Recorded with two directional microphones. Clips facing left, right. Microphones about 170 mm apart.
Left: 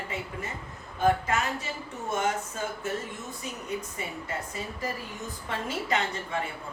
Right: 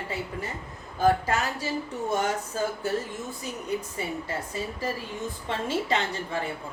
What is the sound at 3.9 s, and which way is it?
A woman's voice, 30° right (ahead or behind).